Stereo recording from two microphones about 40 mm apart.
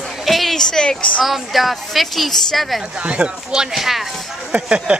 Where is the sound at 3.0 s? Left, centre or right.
Right.